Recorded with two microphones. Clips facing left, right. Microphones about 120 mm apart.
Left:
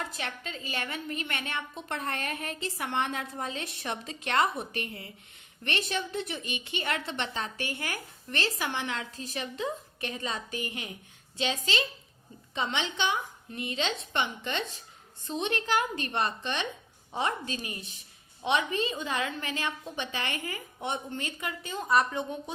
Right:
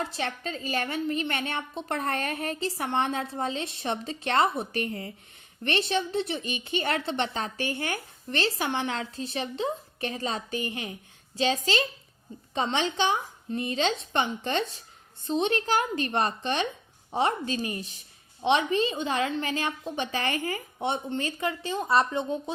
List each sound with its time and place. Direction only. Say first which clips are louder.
0.0 s a woman's voice: right 5 dB; 30° right (ahead or behind)